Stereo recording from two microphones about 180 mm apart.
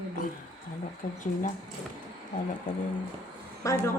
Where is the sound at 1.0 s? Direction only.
45° left (ahead or behind).